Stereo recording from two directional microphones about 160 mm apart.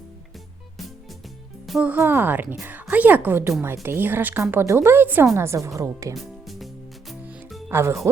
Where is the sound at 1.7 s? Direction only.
10° right (ahead or behind).